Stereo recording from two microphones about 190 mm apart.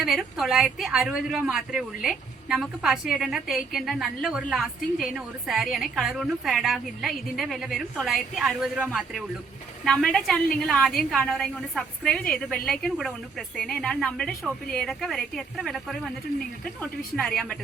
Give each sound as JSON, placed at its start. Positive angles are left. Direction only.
{"t": 0.0, "sound": "speech", "side_deg": 0}
{"t": 17.2, "sound": "speech", "side_deg": 5}